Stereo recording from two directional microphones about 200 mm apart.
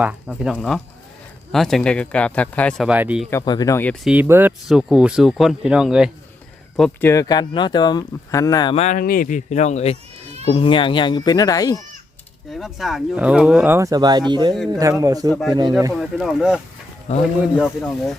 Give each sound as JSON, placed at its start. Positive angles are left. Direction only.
{"t": 0.0, "sound": "speech", "side_deg": -5}
{"t": 3.2, "sound": "speech", "side_deg": 15}
{"t": 4.0, "sound": "speech", "side_deg": -5}
{"t": 7.1, "sound": "speech", "side_deg": 20}
{"t": 8.7, "sound": "speech", "side_deg": 35}
{"t": 12.5, "sound": "speech", "side_deg": 0}
{"t": 15.9, "sound": "speech", "side_deg": 0}
{"t": 17.1, "sound": "speech", "side_deg": 35}
{"t": 17.6, "sound": "speech", "side_deg": 0}